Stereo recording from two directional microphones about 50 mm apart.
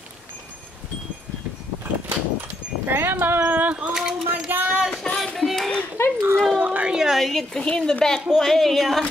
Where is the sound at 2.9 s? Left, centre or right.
Right.